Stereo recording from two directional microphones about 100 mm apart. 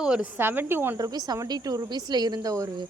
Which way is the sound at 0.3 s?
20° right (ahead or behind).